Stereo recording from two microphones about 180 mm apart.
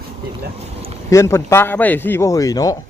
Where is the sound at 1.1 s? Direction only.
15° left (ahead or behind).